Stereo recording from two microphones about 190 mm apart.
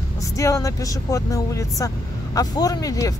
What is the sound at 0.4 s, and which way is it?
Speech, 15° left (ahead or behind).